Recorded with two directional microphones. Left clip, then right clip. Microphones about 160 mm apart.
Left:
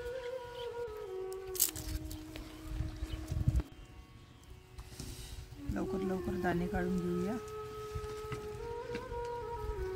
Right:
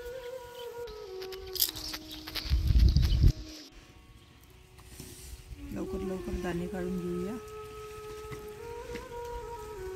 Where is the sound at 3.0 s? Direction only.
5° left (ahead or behind).